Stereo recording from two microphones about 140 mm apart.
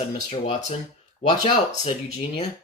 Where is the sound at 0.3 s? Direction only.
45° left (ahead or behind).